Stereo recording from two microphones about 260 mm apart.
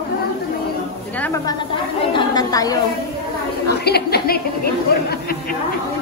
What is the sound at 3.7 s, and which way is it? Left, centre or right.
A woman's voice, left.